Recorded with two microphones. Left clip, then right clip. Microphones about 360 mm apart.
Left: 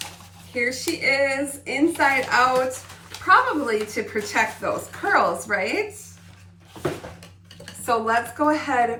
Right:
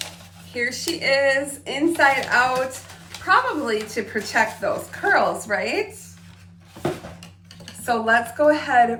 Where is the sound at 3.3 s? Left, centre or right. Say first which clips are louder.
Left 1 dB; centre.